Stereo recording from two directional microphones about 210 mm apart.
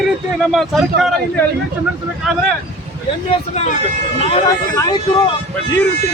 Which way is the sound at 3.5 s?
30° left (ahead or behind).